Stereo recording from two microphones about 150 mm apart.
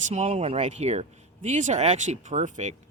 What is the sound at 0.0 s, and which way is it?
A man's voice, 50° right (ahead or behind).